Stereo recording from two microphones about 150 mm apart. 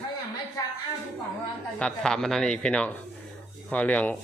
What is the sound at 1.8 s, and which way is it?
Speech, 5° left (ahead or behind).